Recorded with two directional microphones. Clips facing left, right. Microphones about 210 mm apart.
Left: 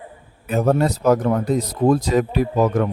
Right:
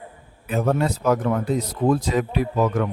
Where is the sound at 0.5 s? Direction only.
40° left (ahead or behind).